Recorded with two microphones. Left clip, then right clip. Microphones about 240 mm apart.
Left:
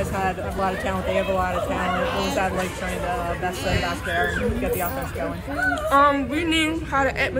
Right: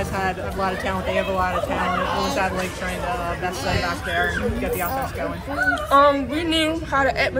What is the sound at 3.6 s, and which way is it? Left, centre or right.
Speech, right.